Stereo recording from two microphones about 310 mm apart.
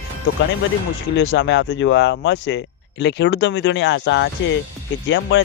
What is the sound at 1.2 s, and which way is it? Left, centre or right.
Speech, left.